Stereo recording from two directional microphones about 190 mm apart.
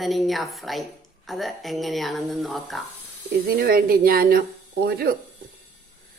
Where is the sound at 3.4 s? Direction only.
50° right (ahead or behind).